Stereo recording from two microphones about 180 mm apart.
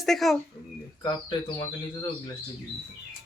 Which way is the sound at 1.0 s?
25° left (ahead or behind).